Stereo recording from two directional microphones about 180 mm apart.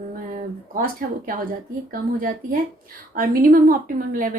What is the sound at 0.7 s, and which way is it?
A woman's voice, 50° right (ahead or behind).